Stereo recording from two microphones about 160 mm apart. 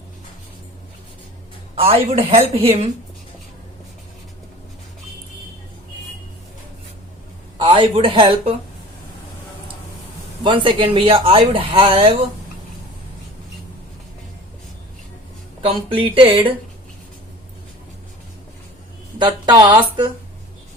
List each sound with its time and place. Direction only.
1.7 s speech: 40° right (ahead or behind)
7.6 s speech: 35° right (ahead or behind)
10.4 s speech: 30° right (ahead or behind)
15.6 s speech: 35° right (ahead or behind)
19.2 s speech: 25° right (ahead or behind)